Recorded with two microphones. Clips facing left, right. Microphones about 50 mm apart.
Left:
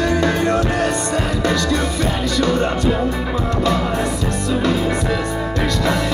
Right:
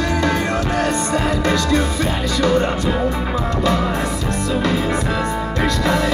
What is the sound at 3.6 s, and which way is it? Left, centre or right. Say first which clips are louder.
Music: even; right.